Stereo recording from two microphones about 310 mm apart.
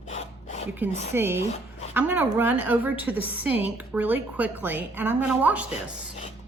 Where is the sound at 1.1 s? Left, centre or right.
Centre.